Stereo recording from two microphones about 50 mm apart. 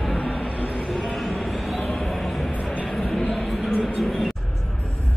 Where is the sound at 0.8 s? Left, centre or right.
Centre.